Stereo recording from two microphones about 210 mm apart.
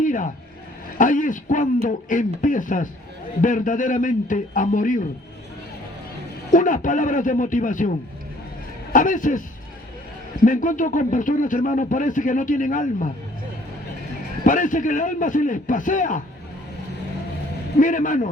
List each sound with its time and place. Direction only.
0.0 s a sound: 40° left (ahead or behind)
0.9 s a man's voice: 40° left (ahead or behind)
6.5 s a man's voice: 40° left (ahead or behind)
8.9 s a man's voice: 40° left (ahead or behind)
10.4 s a man's voice: 40° left (ahead or behind)
14.4 s a man's voice: 40° left (ahead or behind)
17.7 s a man's voice: 40° left (ahead or behind)